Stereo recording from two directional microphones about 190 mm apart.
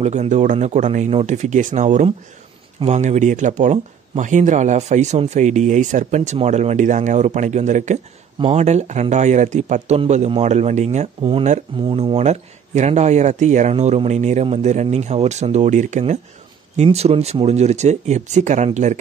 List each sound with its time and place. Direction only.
0.0 s speech: 35° right (ahead or behind)